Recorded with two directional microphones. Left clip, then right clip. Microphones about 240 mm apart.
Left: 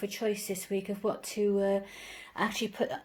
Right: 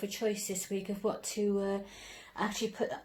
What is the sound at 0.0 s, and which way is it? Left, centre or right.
A woman's voice, left.